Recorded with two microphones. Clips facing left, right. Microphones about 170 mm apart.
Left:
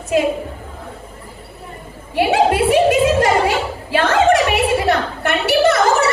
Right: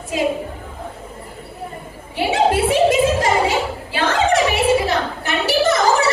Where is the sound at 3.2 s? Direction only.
60° left (ahead or behind).